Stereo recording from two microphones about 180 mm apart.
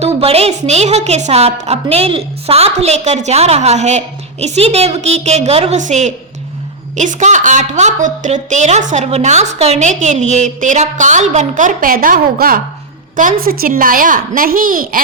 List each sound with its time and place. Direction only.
0.0 s a woman's voice: 35° right (ahead or behind); by 15.0 s 50° right (ahead or behind)